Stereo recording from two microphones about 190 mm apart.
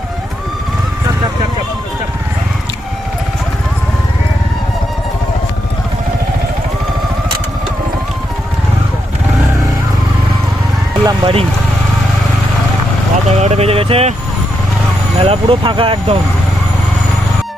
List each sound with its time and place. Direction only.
11.0 s vehicle: 30° right (ahead or behind)
13.2 s speech: 35° right (ahead or behind)
15.2 s speech: 30° right (ahead or behind)